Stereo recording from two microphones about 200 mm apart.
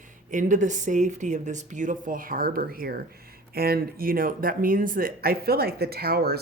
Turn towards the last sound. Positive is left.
turn(degrees=-50)  # may be behind; listen again after turning